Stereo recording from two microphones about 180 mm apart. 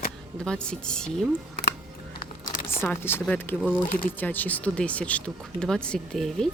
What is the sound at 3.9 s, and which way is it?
Speech, 50° left (ahead or behind).